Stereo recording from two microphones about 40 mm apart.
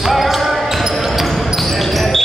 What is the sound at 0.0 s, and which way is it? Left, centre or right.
Basketball bounce, centre.